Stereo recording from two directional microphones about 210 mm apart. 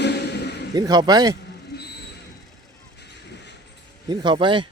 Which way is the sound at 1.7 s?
50° left (ahead or behind).